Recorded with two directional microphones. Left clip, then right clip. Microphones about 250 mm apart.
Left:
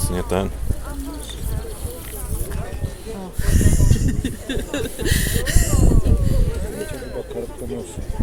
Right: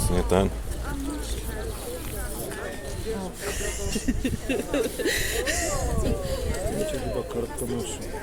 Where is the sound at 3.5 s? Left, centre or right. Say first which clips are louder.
Left 6 dB; left.